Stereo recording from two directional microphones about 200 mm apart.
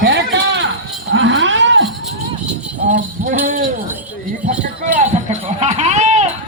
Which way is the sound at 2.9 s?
40° right (ahead or behind).